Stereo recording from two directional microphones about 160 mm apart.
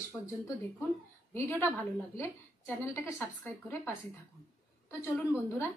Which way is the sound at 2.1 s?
15° left (ahead or behind).